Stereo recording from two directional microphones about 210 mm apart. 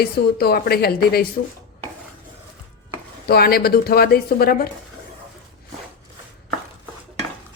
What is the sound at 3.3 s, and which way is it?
Speech, 45° left (ahead or behind).